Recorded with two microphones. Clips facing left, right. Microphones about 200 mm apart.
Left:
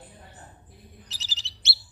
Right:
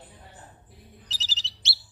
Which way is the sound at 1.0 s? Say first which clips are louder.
Right 2 dB; 50° left (ahead or behind).